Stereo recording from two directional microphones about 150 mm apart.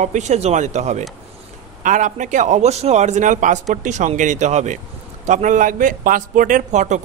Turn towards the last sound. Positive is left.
turn(degrees=-50)  # may be behind; listen again after turning